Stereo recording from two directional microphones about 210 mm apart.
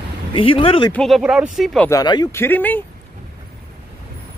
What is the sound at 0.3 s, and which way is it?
Speech, 25° left (ahead or behind).